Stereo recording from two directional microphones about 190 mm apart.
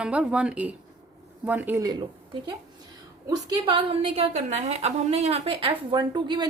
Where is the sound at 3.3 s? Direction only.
25° right (ahead or behind).